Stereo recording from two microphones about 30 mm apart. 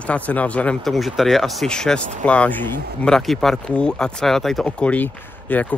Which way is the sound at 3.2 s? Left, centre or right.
Centre.